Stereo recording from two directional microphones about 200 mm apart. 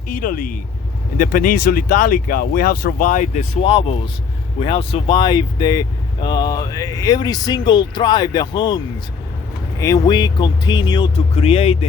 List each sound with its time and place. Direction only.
0.2 s speech: 45° left (ahead or behind)
3.6 s speech: 30° left (ahead or behind)
9.8 s speech: 20° left (ahead or behind)